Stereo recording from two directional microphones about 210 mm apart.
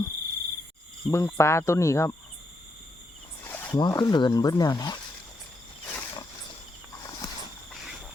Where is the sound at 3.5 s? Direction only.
10° left (ahead or behind).